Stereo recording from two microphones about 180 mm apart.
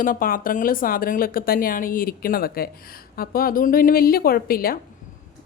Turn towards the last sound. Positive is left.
turn(degrees=55)  # may be behind; listen again after turning